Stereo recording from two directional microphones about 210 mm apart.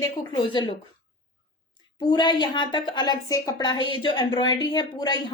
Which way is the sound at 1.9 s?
20° left (ahead or behind).